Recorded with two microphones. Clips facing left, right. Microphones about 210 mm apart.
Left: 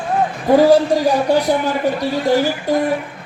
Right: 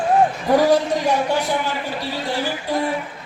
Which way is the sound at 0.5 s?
30° left (ahead or behind).